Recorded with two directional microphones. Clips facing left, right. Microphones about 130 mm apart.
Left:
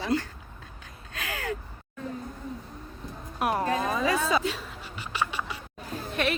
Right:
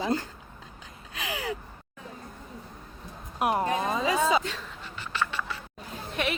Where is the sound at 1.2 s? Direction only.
15° right (ahead or behind).